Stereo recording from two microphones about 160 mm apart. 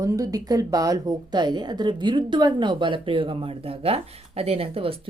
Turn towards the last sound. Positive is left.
turn(degrees=-35)  # may be behind; listen again after turning